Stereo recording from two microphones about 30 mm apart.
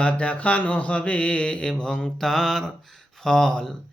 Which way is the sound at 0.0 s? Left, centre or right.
Left.